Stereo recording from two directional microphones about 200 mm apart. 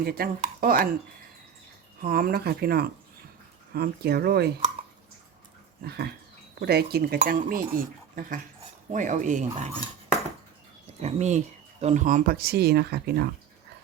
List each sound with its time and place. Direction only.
0.0 s speech: 50° right (ahead or behind)
2.0 s speech: 45° right (ahead or behind)
5.8 s speech: 50° right (ahead or behind); by 9.7 s 35° right (ahead or behind)
11.0 s speech: 35° right (ahead or behind); by 13.3 s 55° right (ahead or behind)